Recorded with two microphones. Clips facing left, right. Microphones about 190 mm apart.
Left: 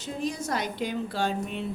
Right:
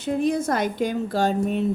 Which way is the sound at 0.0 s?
55° right (ahead or behind).